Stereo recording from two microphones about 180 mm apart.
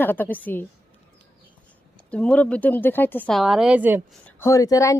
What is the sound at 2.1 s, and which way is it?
Speech, 5° left (ahead or behind).